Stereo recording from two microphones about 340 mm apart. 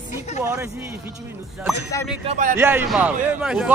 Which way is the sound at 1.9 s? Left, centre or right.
Centre.